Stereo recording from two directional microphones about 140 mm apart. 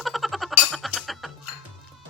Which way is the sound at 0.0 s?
Centre (ahead or behind).